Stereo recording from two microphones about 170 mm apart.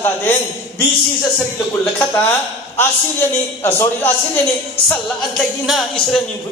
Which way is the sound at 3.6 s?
15° left (ahead or behind).